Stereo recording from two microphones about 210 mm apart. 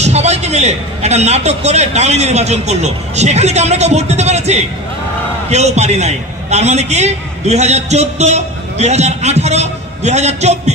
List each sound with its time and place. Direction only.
0.0 s a man's voice: 30° right (ahead or behind)